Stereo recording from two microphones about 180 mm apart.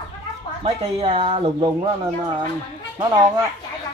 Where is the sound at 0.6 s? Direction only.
35° right (ahead or behind).